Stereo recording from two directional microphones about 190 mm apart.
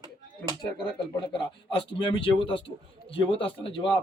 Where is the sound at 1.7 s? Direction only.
25° left (ahead or behind).